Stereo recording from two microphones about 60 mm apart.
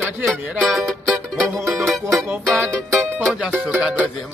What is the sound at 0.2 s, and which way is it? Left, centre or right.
Music, centre.